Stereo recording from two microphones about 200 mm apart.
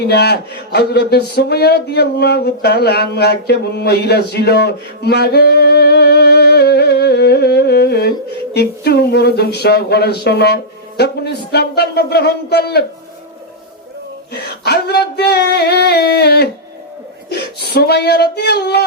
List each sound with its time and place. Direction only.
0.0 s speech: 55° left (ahead or behind)
8.5 s a sound: 55° left (ahead or behind)
10.2 s speech: 55° left (ahead or behind)
14.3 s speech: 55° left (ahead or behind)